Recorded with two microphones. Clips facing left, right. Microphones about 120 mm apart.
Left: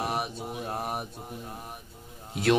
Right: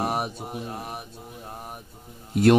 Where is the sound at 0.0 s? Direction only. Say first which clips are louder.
Right 4 dB; 45° right (ahead or behind).